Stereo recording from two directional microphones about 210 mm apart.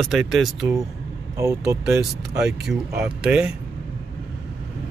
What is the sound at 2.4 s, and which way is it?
Speech, 5° right (ahead or behind).